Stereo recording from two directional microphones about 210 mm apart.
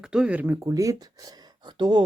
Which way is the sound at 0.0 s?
5° right (ahead or behind).